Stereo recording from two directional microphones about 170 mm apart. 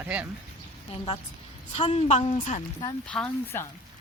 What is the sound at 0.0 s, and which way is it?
Speech, 10° right (ahead or behind).